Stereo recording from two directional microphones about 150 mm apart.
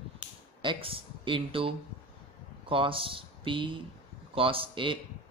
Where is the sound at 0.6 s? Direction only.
35° right (ahead or behind).